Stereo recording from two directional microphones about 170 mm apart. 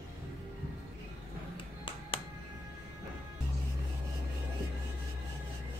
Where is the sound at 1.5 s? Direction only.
30° left (ahead or behind).